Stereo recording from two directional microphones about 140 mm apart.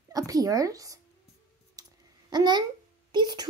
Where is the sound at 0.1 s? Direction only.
25° right (ahead or behind).